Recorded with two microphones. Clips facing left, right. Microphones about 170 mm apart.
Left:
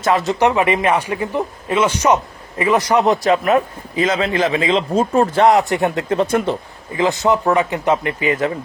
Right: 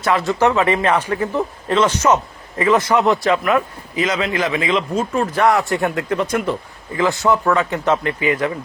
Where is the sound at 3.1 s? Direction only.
30° left (ahead or behind).